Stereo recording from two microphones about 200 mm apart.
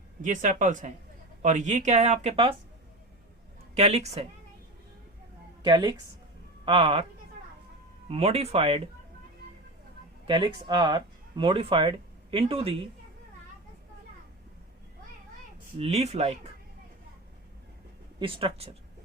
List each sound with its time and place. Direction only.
0.2 s speech: 40° right (ahead or behind)
3.8 s speech: 30° right (ahead or behind)
5.6 s speech: 20° right (ahead or behind)
8.0 s speech: 30° right (ahead or behind)
10.2 s speech: 25° right (ahead or behind)
15.8 s speech: 30° right (ahead or behind)
18.2 s speech: 25° right (ahead or behind)